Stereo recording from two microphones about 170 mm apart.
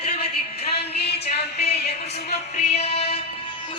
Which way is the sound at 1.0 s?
35° left (ahead or behind).